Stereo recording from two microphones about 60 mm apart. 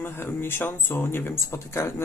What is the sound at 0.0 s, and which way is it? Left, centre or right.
Speech, left.